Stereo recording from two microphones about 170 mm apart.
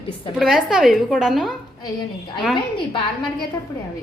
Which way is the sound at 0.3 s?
5° right (ahead or behind).